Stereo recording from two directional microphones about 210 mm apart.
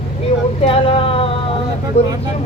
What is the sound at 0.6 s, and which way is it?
Speech, 25° left (ahead or behind).